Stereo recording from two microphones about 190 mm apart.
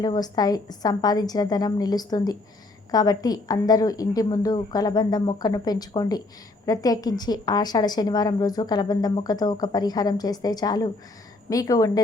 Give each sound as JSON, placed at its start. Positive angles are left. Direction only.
{"t": 0.0, "sound": "a woman's voice", "side_deg": 20}